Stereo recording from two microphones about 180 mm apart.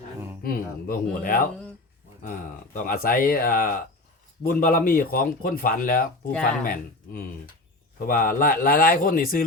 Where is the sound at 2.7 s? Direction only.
50° left (ahead or behind).